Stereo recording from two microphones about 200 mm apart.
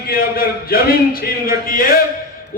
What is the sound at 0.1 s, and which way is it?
A man's voice, 50° left (ahead or behind).